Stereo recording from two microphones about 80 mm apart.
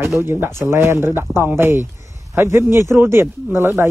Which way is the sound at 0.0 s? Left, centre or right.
Right.